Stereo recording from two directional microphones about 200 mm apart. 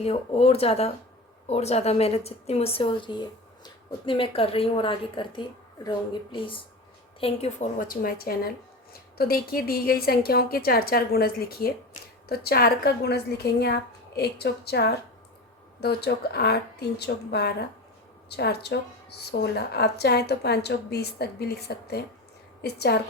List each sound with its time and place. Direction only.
0.0 s a woman's voice: 30° left (ahead or behind); by 23.0 s 55° left (ahead or behind)